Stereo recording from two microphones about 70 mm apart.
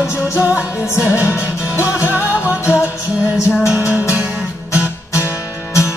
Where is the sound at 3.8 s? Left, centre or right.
Left.